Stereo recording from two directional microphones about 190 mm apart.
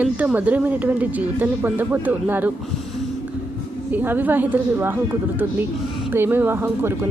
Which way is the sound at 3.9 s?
10° right (ahead or behind).